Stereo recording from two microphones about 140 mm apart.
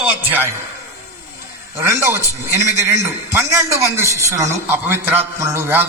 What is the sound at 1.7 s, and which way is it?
A man's voice, 20° right (ahead or behind).